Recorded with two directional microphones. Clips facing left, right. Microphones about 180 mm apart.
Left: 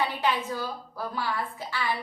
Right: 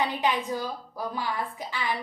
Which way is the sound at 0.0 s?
15° right (ahead or behind).